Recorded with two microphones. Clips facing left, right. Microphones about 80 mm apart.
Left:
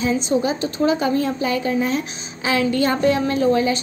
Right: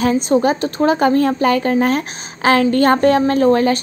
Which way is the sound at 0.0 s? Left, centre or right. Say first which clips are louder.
Right 5 dB; right.